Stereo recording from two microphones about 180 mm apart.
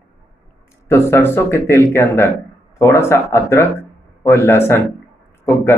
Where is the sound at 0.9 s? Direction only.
15° left (ahead or behind).